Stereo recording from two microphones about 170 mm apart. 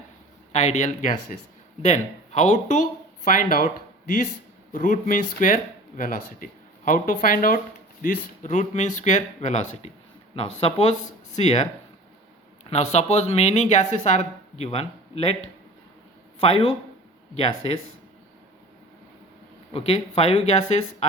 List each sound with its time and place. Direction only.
0.5 s speech: 45° left (ahead or behind)
4.7 s speech: 50° left (ahead or behind)
12.6 s speech: 40° left (ahead or behind)
19.7 s speech: 35° left (ahead or behind)